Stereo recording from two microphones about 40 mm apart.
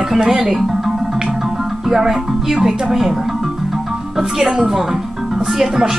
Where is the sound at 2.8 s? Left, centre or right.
Centre.